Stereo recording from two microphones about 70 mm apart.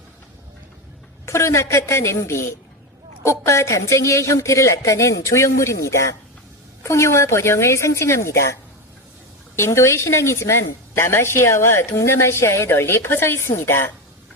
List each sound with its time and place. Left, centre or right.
1.2 s speech: left
9.6 s a woman's voice: left